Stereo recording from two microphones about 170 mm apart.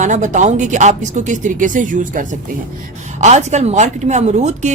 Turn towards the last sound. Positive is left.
turn(degrees=-45)  # may be behind; listen again after turning